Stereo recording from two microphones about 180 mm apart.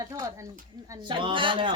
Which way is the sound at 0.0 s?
20° right (ahead or behind).